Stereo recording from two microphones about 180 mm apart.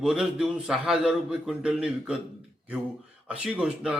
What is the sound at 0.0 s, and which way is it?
A man's voice, 5° right (ahead or behind).